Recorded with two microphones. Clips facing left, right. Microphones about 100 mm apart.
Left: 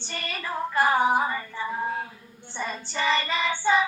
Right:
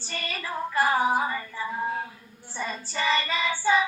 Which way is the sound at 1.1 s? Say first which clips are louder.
Left 1 dB; 15° left (ahead or behind).